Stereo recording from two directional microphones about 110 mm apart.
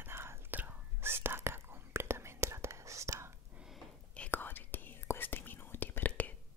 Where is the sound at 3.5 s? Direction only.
5° right (ahead or behind).